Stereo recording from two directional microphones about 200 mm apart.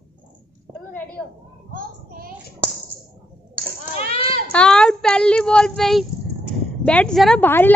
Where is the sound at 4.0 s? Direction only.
45° right (ahead or behind).